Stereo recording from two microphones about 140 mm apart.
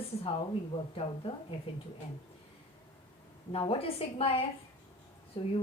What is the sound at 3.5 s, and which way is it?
Speech, 45° left (ahead or behind).